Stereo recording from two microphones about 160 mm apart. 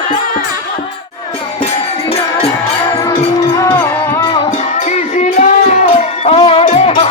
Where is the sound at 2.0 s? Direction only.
35° left (ahead or behind).